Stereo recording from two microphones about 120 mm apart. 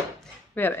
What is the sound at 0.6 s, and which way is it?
Speech, 15° left (ahead or behind).